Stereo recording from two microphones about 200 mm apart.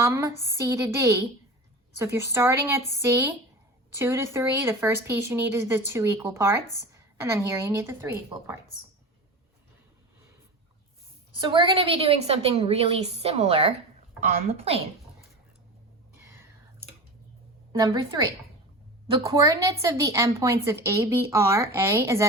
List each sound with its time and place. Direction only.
0.0 s speech: 15° right (ahead or behind)
11.3 s a woman's voice: 25° right (ahead or behind)
17.7 s a woman's voice: 20° right (ahead or behind)